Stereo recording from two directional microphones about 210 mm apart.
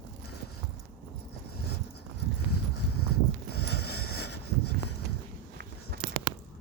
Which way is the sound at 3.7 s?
90° left.